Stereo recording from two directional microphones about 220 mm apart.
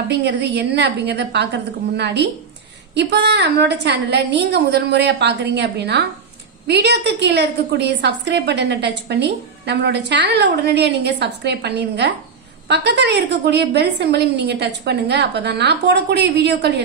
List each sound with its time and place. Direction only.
0.1 s a woman's voice: 50° right (ahead or behind)